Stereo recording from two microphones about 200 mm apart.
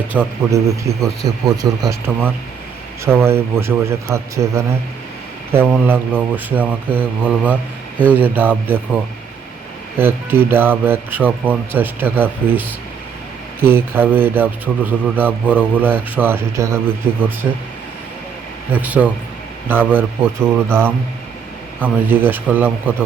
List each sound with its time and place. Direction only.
0.1 s speech: 10° right (ahead or behind)
5.8 s speech: 10° right (ahead or behind)
10.0 s speech: 10° right (ahead or behind)
18.7 s speech: 10° right (ahead or behind)